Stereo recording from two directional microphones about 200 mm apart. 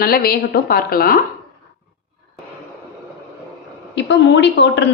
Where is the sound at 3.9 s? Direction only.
60° left (ahead or behind).